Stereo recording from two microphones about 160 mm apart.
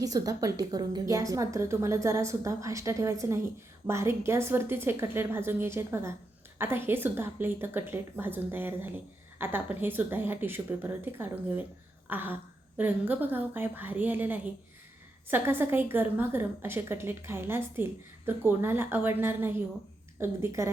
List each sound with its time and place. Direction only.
0.0 s a woman's voice: 20° right (ahead or behind)